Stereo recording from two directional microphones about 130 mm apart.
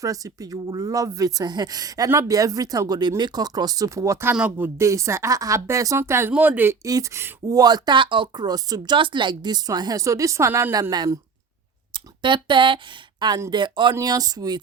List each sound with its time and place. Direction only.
0.0 s speech: 25° right (ahead or behind)
6.8 s speech: 25° right (ahead or behind)